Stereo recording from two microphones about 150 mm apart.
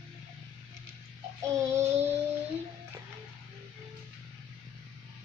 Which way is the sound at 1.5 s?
20° right (ahead or behind).